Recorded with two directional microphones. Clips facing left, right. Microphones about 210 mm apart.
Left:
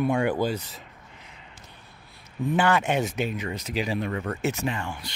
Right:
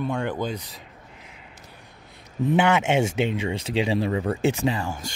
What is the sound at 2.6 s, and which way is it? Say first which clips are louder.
Speech: right 2 dB; 20° right (ahead or behind).